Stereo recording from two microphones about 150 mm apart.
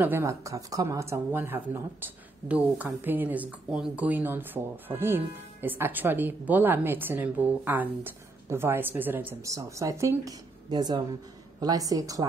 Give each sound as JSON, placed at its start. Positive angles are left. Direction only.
{"t": 0.0, "sound": "a woman's voice", "side_deg": -15}